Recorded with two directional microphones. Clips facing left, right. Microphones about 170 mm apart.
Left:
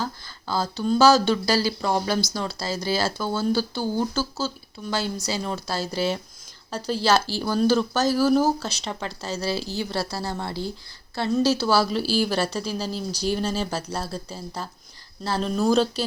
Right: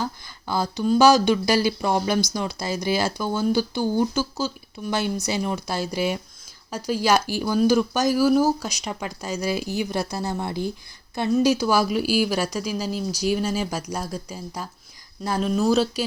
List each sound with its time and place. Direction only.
0.0 s speech: 15° right (ahead or behind)